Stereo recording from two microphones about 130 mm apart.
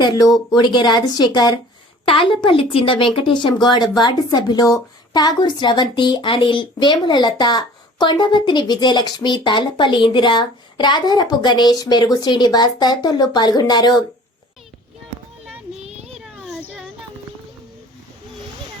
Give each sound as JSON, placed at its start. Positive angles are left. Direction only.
{"t": 0.0, "sound": "speech", "side_deg": 30}
{"t": 15.8, "sound": "a sound", "side_deg": -55}
{"t": 16.1, "sound": "children playing", "side_deg": -5}